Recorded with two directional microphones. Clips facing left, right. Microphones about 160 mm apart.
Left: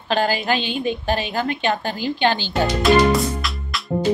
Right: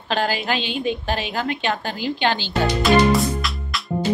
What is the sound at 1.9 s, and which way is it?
Speech, 45° left (ahead or behind).